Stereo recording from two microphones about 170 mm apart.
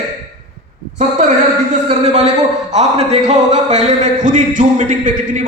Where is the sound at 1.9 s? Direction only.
40° right (ahead or behind).